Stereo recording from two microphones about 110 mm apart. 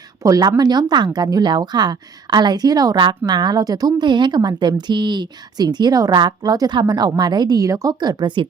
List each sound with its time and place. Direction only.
0.2 s speech: 35° right (ahead or behind)